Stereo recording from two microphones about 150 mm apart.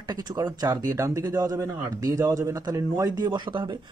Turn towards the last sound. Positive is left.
turn(degrees=-30)  # may be behind; listen again after turning